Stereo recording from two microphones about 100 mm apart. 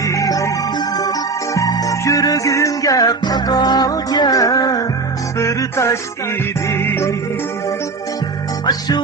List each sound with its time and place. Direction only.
0.0 s music: 35° left (ahead or behind)
1.5 s music: 35° left (ahead or behind)